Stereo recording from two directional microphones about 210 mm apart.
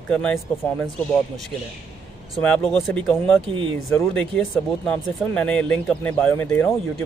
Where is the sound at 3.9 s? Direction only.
5° left (ahead or behind).